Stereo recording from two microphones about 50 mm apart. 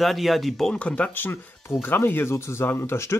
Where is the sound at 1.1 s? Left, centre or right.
Left.